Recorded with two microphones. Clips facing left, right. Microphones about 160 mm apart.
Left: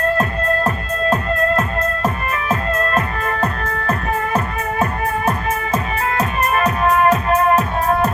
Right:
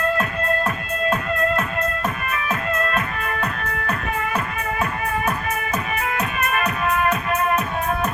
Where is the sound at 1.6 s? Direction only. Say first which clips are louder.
Left 4 dB; 35° left (ahead or behind).